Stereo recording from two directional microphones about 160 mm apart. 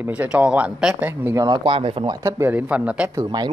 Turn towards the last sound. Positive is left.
turn(degrees=-25)  # may be behind; listen again after turning